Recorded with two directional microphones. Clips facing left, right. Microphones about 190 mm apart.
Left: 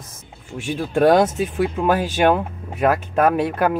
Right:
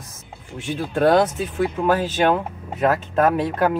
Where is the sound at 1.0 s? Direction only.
15° left (ahead or behind).